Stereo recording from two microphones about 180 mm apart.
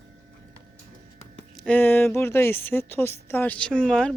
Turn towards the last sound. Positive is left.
turn(degrees=5)  # may be behind; listen again after turning